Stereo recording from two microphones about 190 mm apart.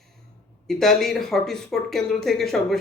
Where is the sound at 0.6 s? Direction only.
Centre (ahead or behind).